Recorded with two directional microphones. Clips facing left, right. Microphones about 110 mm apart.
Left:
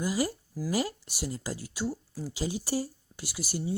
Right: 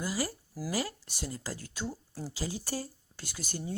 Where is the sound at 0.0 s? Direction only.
15° left (ahead or behind).